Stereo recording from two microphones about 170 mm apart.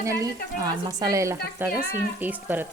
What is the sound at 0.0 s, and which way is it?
Speech, 20° right (ahead or behind).